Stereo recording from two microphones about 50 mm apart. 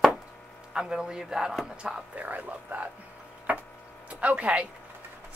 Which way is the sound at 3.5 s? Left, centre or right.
Right.